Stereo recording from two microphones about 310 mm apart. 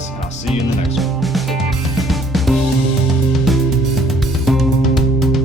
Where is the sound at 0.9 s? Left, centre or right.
Centre.